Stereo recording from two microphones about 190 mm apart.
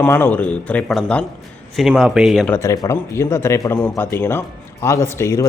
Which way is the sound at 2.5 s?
15° left (ahead or behind).